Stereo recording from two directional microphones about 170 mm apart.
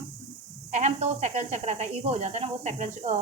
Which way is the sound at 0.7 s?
40° right (ahead or behind).